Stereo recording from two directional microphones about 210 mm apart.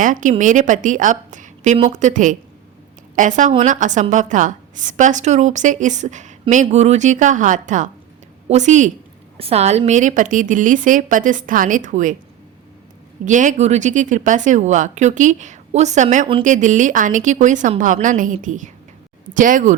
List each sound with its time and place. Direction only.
0.0 s speech: 40° right (ahead or behind)
13.2 s speech: 35° right (ahead or behind)